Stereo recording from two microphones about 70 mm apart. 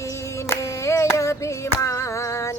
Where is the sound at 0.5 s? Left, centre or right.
Left.